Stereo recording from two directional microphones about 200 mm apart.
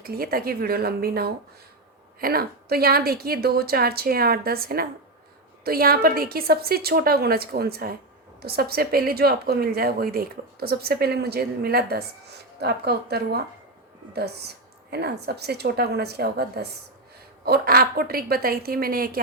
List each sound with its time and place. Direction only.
0.0 s a woman's voice: 50° right (ahead or behind)